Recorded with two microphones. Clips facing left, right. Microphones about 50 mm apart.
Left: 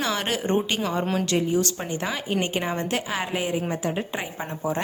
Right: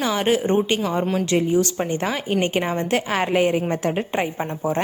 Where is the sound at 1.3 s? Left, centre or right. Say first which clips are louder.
Right 4 dB; right.